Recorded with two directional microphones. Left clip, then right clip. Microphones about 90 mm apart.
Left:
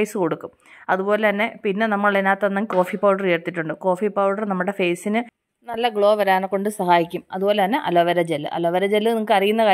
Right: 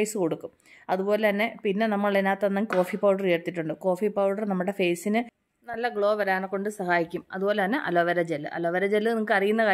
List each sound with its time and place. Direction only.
0.0 s speech: 25° left (ahead or behind)
5.7 s speech: 90° left; by 9.7 s 50° left (ahead or behind)